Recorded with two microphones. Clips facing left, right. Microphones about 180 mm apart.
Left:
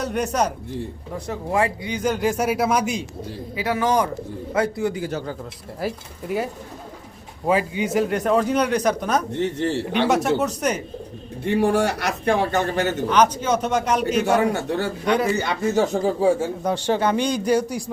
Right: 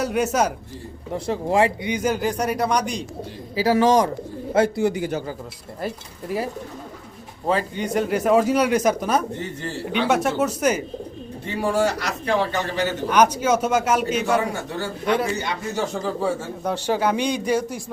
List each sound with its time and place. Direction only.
0.0 s speech: 5° right (ahead or behind)
1.1 s speech: 25° right (ahead or behind)
2.0 s speech: 5° right (ahead or behind)
3.5 s a man's voice: 30° right (ahead or behind)
4.8 s a man's voice: 15° right (ahead or behind)
5.8 s speech: centre (ahead or behind)
9.4 s speech: 70° left (ahead or behind)
10.1 s speech: centre (ahead or behind)
11.4 s a man's voice: 60° left (ahead or behind)
13.1 s a man's voice: 10° right (ahead or behind)
14.3 s a man's voice: 65° left (ahead or behind)
15.0 s speech: centre (ahead or behind)
15.7 s speech: 50° left (ahead or behind)
16.6 s a man's voice: 5° right (ahead or behind)